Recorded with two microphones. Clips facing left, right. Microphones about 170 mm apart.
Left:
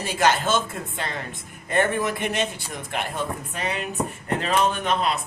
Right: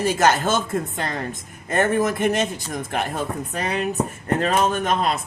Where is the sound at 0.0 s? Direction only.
45° right (ahead or behind).